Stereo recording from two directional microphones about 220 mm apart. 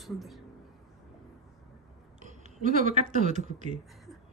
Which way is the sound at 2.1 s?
35° right (ahead or behind).